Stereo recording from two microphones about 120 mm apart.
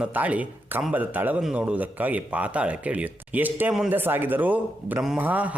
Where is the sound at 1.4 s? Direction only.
5° right (ahead or behind).